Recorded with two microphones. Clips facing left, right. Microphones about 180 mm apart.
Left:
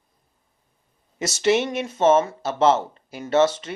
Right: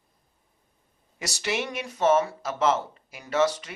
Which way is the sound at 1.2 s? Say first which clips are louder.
Left 10 dB; 25° left (ahead or behind).